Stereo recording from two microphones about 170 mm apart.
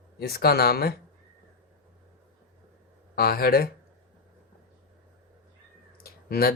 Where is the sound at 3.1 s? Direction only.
65° left (ahead or behind).